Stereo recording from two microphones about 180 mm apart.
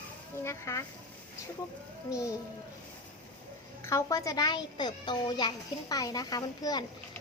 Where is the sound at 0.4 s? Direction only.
15° left (ahead or behind).